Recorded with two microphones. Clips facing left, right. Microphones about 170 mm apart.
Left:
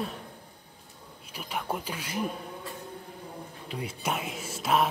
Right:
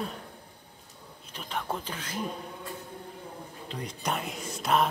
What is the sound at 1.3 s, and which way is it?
Speech, 10° left (ahead or behind).